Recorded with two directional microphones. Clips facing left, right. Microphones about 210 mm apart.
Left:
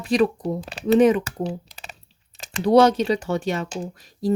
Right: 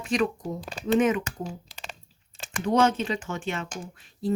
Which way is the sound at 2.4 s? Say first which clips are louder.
Left 7 dB; 35° left (ahead or behind).